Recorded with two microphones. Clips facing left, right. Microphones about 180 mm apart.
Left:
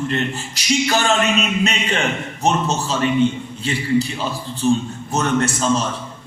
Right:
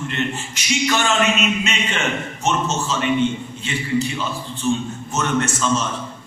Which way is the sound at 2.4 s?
35° left (ahead or behind).